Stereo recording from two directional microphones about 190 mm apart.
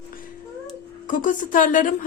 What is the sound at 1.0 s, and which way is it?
Speech, 45° left (ahead or behind).